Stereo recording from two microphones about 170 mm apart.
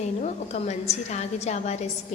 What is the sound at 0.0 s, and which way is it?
A woman's voice, 45° left (ahead or behind).